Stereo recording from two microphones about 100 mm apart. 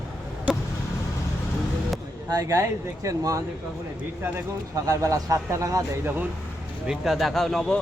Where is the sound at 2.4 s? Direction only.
30° right (ahead or behind).